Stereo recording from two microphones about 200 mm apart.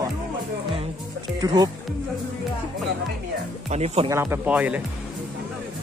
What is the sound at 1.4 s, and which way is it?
Speech, 20° right (ahead or behind).